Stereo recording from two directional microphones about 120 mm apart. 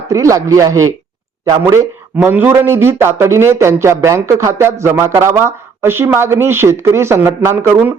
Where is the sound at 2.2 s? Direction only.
20° right (ahead or behind).